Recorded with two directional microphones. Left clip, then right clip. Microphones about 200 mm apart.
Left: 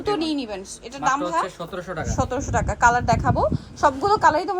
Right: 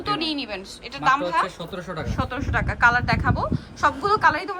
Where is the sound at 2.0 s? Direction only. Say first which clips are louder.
Left 5 dB; 20° left (ahead or behind).